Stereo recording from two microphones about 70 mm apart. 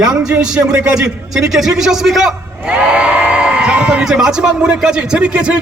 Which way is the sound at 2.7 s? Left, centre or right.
Centre.